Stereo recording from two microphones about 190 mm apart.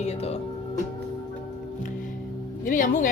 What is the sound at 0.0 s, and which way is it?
Music, 35° left (ahead or behind).